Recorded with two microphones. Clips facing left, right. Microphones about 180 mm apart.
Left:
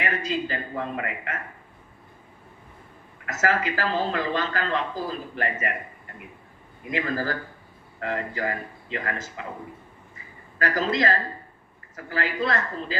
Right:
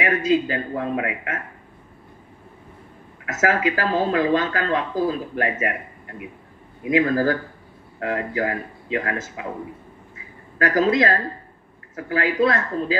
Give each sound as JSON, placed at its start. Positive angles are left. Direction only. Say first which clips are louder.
{"t": 0.0, "sound": "speech", "louder": "right 8 dB", "side_deg": -50}
{"t": 3.3, "sound": "speech", "louder": "right 4 dB", "side_deg": -50}
{"t": 6.9, "sound": "speech", "louder": "right 9 dB", "side_deg": -50}
{"t": 10.6, "sound": "speech", "louder": "right 6 dB", "side_deg": -50}